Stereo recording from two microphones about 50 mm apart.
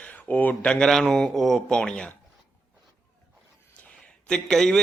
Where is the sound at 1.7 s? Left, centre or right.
Centre.